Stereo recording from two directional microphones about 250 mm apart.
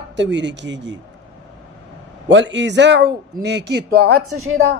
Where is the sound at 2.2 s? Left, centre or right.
Right.